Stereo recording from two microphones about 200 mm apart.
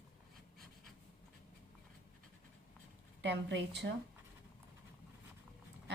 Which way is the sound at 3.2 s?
60° right (ahead or behind).